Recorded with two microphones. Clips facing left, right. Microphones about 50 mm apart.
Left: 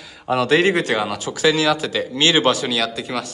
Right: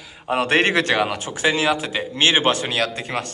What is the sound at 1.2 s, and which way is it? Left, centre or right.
Speech, right.